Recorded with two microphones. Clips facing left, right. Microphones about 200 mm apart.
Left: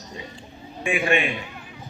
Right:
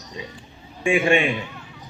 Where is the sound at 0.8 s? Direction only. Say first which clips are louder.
Right 4 dB; 25° right (ahead or behind).